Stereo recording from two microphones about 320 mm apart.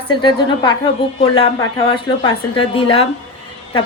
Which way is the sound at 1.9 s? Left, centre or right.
Centre.